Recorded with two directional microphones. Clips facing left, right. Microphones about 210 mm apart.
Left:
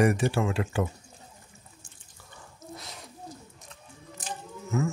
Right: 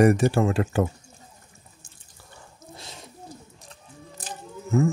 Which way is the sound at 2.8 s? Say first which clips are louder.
Right 1 dB; 30° right (ahead or behind).